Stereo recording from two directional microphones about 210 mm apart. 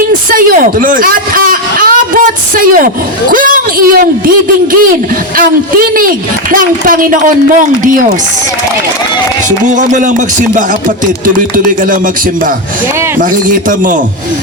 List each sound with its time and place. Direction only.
0.3 s a man's voice: 40° right (ahead or behind)
9.6 s a man's voice: 35° right (ahead or behind)
11.5 s a man's voice: 40° right (ahead or behind)